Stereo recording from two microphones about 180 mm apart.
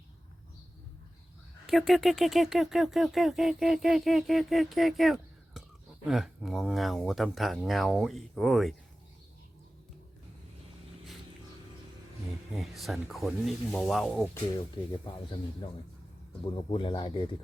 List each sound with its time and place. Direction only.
1.6 s speech: centre (ahead or behind)
12.5 s speech: centre (ahead or behind)
16.4 s speech: 25° left (ahead or behind)